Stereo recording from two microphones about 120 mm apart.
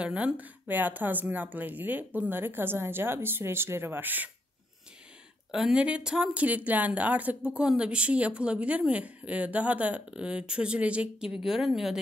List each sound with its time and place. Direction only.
0.0 s speech: 10° right (ahead or behind)
5.5 s speech: 5° right (ahead or behind)